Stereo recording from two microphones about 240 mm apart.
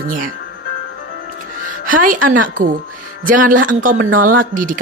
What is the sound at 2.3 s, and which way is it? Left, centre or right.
Speech, right.